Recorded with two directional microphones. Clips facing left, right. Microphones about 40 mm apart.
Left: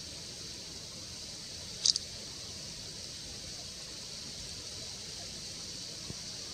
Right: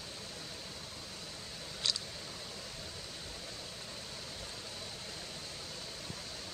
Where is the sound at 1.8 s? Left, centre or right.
Right.